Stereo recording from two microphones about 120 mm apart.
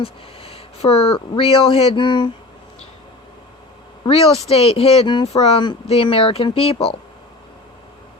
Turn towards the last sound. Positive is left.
turn(degrees=50)  # may be behind; listen again after turning